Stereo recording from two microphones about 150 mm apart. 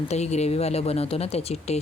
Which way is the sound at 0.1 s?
45° left (ahead or behind).